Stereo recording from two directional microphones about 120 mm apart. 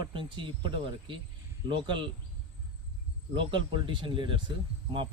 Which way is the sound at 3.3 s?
45° right (ahead or behind).